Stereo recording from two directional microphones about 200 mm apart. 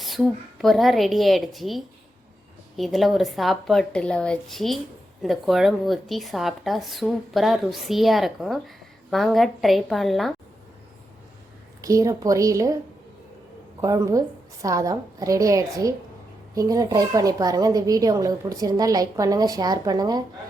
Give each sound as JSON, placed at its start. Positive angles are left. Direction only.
{"t": 0.0, "sound": "a woman's voice", "side_deg": 0}
{"t": 11.8, "sound": "speech", "side_deg": -15}
{"t": 13.8, "sound": "speech", "side_deg": -15}